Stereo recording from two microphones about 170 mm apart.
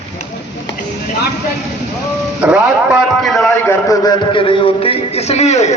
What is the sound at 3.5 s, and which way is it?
A man's voice, 15° left (ahead or behind).